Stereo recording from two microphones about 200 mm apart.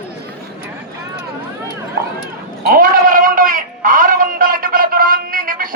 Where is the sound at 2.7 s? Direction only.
45° right (ahead or behind).